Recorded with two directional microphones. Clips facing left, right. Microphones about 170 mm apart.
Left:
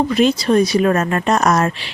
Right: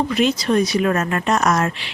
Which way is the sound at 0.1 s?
35° left (ahead or behind).